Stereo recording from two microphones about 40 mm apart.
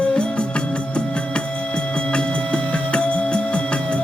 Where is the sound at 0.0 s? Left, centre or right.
Left.